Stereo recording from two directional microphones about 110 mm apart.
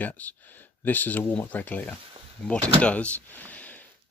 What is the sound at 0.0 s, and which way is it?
Speech, 15° left (ahead or behind).